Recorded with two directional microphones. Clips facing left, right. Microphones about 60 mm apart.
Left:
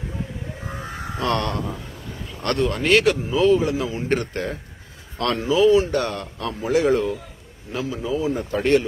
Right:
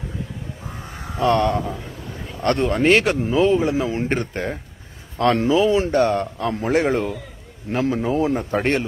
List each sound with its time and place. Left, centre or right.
1.2 s a man's voice: centre
2.4 s speech: right
5.3 s speech: right
6.6 s a man's voice: right